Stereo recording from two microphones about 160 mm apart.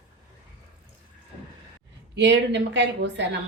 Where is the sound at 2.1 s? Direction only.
90° right.